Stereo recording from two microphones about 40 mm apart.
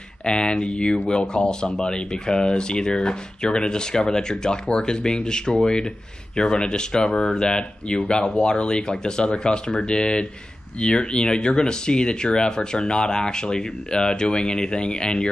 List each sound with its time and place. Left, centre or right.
0.2 s speech: left